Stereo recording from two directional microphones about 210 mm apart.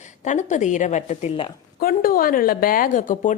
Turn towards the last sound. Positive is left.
turn(degrees=40)  # may be behind; listen again after turning